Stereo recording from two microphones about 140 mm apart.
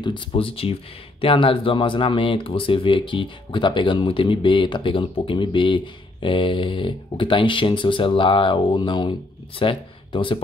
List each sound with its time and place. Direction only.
0.0 s speech: 35° left (ahead or behind)